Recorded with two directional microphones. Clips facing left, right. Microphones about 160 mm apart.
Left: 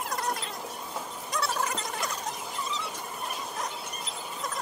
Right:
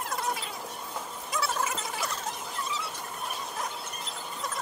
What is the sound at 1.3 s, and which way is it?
Squeal, centre (ahead or behind).